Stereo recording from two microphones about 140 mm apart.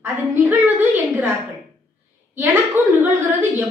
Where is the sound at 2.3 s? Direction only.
15° right (ahead or behind).